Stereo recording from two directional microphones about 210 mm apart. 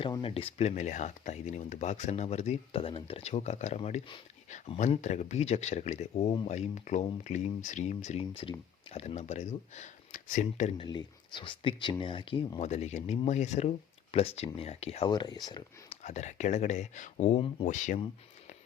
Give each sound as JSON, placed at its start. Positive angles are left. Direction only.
{"t": 0.0, "sound": "speech", "side_deg": 25}
{"t": 10.8, "sound": "speech", "side_deg": 20}
{"t": 16.0, "sound": "speech", "side_deg": 35}